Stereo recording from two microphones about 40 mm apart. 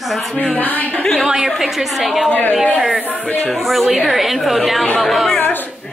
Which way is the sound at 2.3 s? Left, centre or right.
Left.